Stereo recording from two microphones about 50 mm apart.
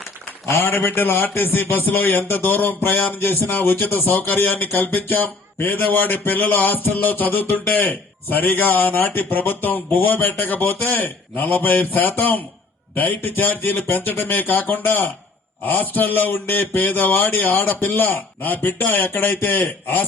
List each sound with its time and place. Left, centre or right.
0.6 s speech: left